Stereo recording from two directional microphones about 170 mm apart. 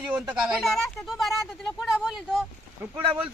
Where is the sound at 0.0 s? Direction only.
5° right (ahead or behind).